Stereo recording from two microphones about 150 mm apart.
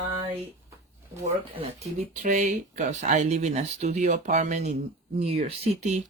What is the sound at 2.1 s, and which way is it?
Speech, 55° right (ahead or behind).